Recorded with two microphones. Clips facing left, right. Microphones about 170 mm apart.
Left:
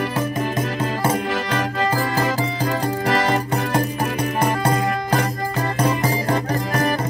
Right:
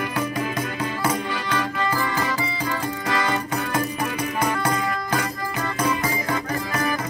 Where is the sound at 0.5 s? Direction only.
50° left (ahead or behind).